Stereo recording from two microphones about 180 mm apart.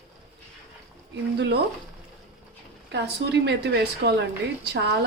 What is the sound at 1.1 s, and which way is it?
Speech, 70° right (ahead or behind).